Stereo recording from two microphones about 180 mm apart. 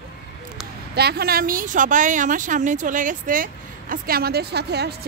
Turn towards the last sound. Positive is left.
turn(degrees=-65)  # may be behind; listen again after turning